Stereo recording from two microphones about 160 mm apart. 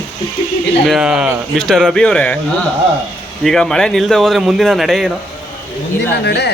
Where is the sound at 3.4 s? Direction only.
5° left (ahead or behind).